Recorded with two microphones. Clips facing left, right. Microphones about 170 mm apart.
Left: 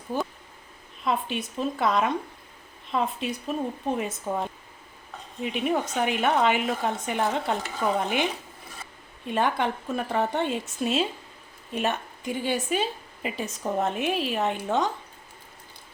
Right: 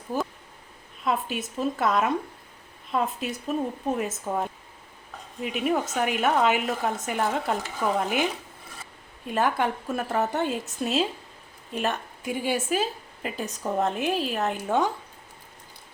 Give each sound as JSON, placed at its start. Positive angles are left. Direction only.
{"t": 1.0, "sound": "a woman's voice", "side_deg": -5}